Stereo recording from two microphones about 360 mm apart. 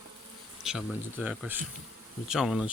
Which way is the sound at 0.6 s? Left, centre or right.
Centre.